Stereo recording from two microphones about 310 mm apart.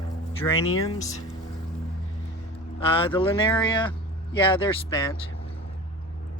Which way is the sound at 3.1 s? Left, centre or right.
Centre.